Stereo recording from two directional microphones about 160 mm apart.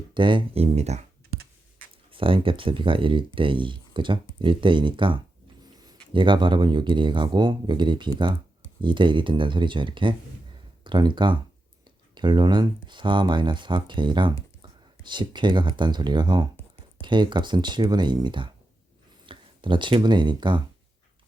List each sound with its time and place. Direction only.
0.1 s speech: 30° right (ahead or behind)
2.0 s speech: 35° right (ahead or behind)